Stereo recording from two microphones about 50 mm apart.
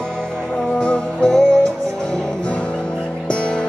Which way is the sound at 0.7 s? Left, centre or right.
Centre.